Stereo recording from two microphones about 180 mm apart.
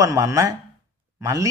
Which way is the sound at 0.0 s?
15° right (ahead or behind).